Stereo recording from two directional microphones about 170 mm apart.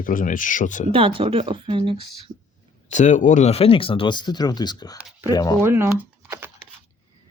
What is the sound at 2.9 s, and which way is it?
Speech, 45° left (ahead or behind).